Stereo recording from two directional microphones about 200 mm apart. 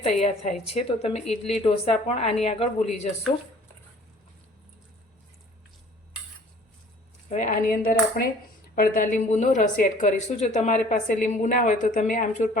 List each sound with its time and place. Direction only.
0.0 s speech: 30° left (ahead or behind)
7.3 s speech: 40° left (ahead or behind)